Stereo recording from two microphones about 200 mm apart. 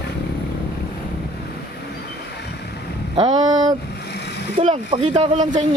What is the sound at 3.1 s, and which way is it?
Speech, 20° right (ahead or behind).